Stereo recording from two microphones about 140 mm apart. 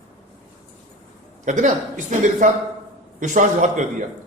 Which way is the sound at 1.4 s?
65° right (ahead or behind).